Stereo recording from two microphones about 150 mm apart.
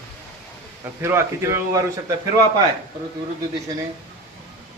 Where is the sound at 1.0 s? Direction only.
20° right (ahead or behind).